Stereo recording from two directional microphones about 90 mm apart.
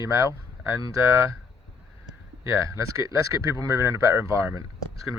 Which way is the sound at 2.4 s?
35° right (ahead or behind).